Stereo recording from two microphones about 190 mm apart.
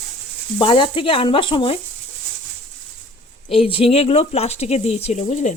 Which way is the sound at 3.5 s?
30° left (ahead or behind).